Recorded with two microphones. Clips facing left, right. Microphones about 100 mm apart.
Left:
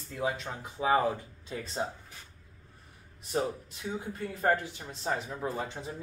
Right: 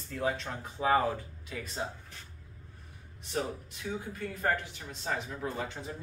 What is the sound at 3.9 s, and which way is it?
Speech, 20° left (ahead or behind).